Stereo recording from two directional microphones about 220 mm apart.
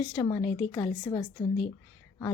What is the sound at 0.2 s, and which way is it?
A woman's voice, 15° left (ahead or behind).